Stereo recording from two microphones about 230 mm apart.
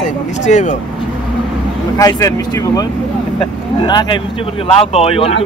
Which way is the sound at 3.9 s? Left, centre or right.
Centre.